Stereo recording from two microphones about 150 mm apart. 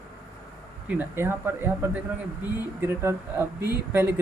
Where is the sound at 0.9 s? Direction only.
15° right (ahead or behind).